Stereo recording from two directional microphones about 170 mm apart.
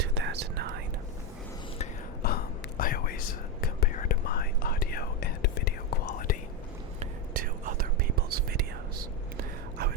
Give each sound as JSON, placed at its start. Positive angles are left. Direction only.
{"t": 0.0, "sound": "whispering", "side_deg": -85}
{"t": 2.2, "sound": "whispering", "side_deg": 60}
{"t": 6.1, "sound": "whispering", "side_deg": 50}
{"t": 7.3, "sound": "whispering", "side_deg": -55}